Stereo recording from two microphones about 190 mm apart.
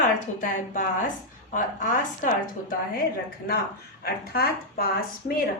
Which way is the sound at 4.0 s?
55° left (ahead or behind).